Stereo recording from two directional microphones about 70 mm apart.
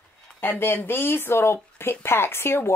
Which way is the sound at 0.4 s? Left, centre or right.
Left.